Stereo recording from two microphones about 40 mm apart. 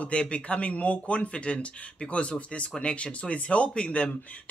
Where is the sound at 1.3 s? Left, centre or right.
Left.